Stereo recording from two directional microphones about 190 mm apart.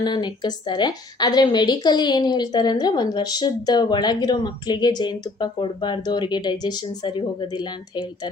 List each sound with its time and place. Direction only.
0.0 s a woman's voice: 25° left (ahead or behind)